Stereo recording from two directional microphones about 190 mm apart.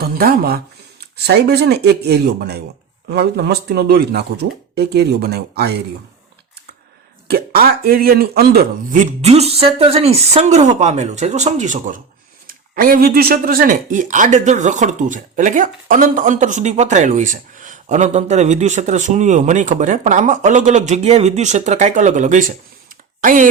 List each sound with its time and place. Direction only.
0.0 s speech: 50° right (ahead or behind)
7.3 s speech: 50° right (ahead or behind)